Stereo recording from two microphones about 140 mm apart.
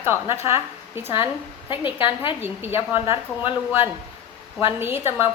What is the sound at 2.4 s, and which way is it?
Speech, 15° right (ahead or behind).